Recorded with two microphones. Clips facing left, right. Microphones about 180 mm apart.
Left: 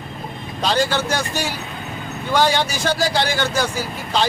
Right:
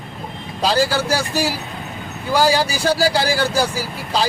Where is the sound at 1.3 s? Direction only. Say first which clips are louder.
Right 4 dB; 35° right (ahead or behind).